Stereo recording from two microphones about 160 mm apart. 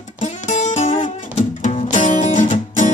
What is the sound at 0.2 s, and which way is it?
Music, 45° left (ahead or behind).